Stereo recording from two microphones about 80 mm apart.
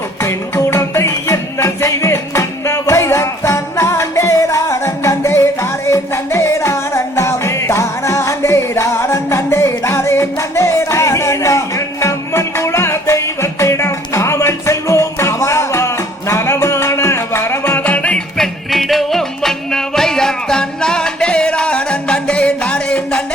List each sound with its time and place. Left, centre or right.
0.2 s music: left; by 18.4 s centre
18.7 s music: centre